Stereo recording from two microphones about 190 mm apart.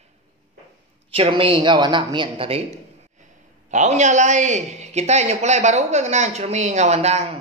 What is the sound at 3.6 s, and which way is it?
A man's voice, 40° right (ahead or behind).